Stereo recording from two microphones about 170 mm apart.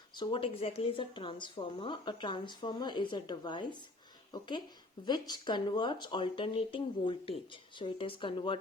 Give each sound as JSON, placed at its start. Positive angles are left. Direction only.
{"t": 0.2, "sound": "a woman's voice", "side_deg": 30}